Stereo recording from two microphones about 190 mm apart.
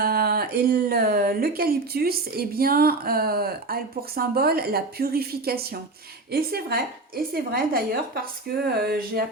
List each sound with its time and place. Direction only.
0.0 s a woman's voice: 50° right (ahead or behind)